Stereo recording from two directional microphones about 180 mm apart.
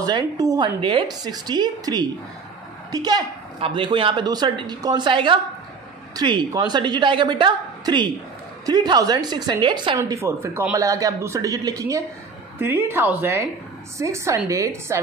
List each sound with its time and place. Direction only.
0.0 s a woman's voice: 20° right (ahead or behind)